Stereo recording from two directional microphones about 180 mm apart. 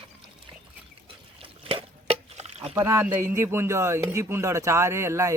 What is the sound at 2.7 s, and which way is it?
Speech, 15° right (ahead or behind).